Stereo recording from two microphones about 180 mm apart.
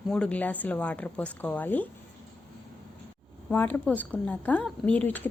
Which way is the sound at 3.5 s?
10° left (ahead or behind).